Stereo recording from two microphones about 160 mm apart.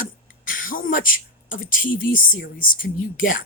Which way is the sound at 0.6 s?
60° left (ahead or behind).